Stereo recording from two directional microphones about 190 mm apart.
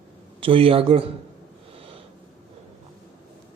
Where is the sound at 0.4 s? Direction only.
30° right (ahead or behind).